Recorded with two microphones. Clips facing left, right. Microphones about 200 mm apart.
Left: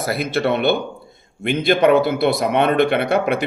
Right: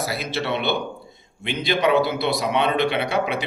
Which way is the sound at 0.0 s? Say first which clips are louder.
Left 6 dB; 55° left (ahead or behind).